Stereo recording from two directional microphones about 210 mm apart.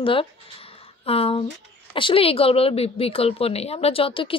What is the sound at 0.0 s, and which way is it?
A woman's voice, 25° left (ahead or behind).